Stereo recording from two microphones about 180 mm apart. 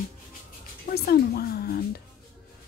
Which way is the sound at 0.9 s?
60° left (ahead or behind).